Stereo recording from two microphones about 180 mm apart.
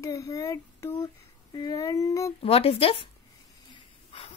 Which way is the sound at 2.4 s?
35° left (ahead or behind).